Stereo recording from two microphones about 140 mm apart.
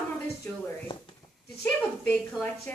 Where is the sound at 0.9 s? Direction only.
35° left (ahead or behind).